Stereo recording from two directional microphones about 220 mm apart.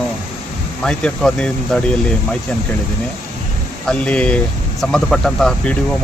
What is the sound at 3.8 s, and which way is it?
Speech, 5° left (ahead or behind).